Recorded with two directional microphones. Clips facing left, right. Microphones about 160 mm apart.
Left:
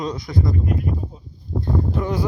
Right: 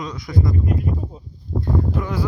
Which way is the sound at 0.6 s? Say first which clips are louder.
Right 1 dB; 30° right (ahead or behind).